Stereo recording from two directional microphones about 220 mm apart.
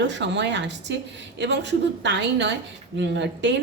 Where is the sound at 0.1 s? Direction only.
55° right (ahead or behind).